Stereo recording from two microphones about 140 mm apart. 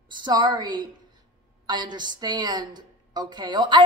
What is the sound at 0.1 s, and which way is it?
A woman's voice, 35° right (ahead or behind).